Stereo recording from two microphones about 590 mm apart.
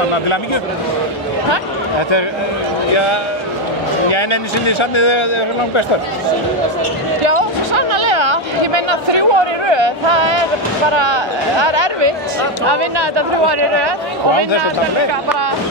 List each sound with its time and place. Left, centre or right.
4.1 s a man's voice: left
7.2 s chatter: right
10.9 s speech: right